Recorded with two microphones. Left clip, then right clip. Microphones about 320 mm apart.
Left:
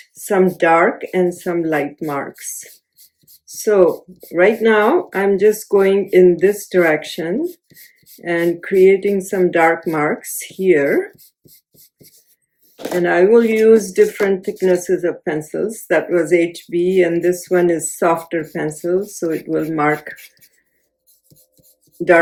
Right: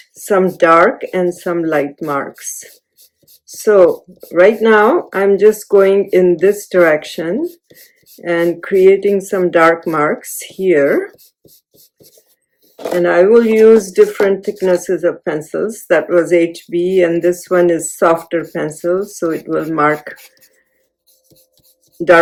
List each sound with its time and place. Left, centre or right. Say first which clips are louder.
0.3 s speech: right 3 dB; centre
3.7 s speech: right 4 dB; centre
13.0 s speech: right 3 dB; centre
21.9 s a sound: right 3 dB; centre